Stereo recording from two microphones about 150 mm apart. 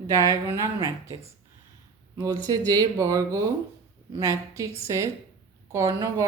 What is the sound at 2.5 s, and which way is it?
Speech, 25° right (ahead or behind).